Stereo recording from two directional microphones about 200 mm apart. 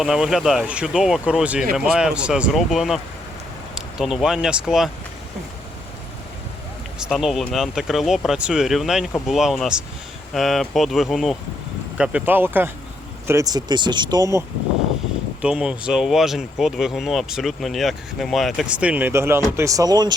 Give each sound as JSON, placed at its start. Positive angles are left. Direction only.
{"t": 0.0, "sound": "speech", "side_deg": 0}
{"t": 7.1, "sound": "speech", "side_deg": 0}
{"t": 15.4, "sound": "speech", "side_deg": -5}